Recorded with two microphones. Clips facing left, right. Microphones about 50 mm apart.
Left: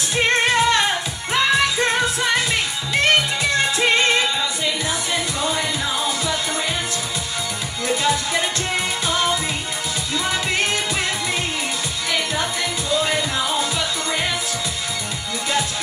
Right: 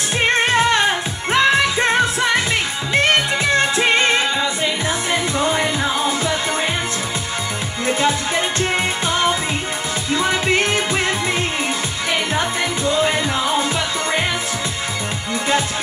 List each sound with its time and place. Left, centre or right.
1.3 s music: right
5.4 s music: right